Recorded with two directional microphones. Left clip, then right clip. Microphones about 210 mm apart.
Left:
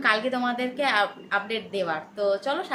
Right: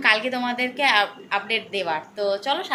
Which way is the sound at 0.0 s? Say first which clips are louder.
Right 3 dB; 15° left (ahead or behind).